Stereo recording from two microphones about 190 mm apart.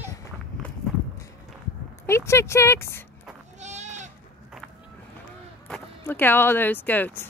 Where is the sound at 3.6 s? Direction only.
35° right (ahead or behind).